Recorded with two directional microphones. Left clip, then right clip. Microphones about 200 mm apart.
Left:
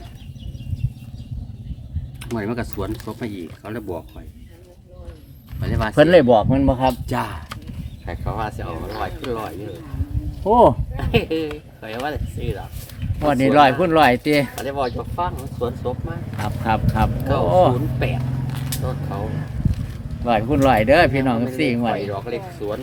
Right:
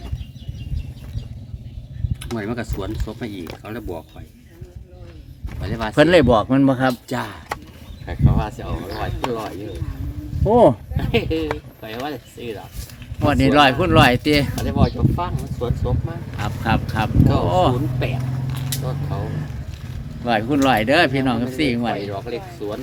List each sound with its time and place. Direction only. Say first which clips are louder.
2.3 s speech: left 1 dB; centre (ahead or behind)
5.5 s speech: left 1 dB; centre (ahead or behind)
6.2 s speech: even; 15° right (ahead or behind)
7.1 s speech: left 1 dB; centre (ahead or behind)
10.5 s speech: even; 30° right (ahead or behind)
10.9 s speech: even; centre (ahead or behind)
18.4 s vehicle: even; 60° left (ahead or behind)
20.2 s speech: left 1 dB; centre (ahead or behind)